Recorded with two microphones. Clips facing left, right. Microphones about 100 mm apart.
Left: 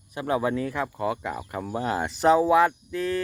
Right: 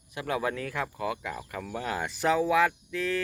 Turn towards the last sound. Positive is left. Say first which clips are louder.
# left 3 dB
turn(degrees=35)  # may be behind; listen again after turning